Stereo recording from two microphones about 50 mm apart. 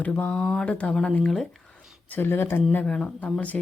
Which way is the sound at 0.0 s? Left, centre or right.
Left.